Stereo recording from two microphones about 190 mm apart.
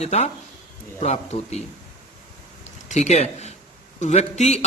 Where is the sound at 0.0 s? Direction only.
35° left (ahead or behind).